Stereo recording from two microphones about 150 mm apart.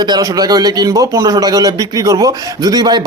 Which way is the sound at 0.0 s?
25° right (ahead or behind).